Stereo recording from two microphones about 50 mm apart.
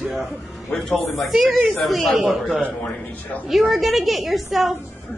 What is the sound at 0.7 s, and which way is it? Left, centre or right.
Speech, centre.